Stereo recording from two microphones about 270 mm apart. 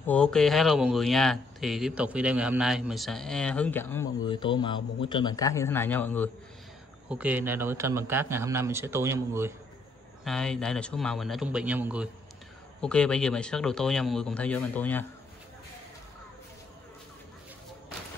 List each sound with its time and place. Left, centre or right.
0.0 s speech: centre
7.1 s a man's voice: centre
10.2 s speech: centre